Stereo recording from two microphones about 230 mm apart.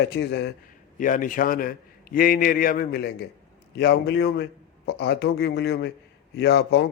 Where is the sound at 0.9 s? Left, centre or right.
Left.